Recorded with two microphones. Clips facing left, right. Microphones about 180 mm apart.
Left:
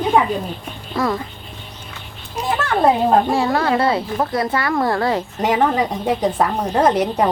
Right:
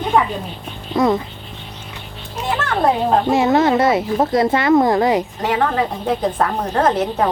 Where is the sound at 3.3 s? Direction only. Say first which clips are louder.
Right 3 dB; 20° right (ahead or behind).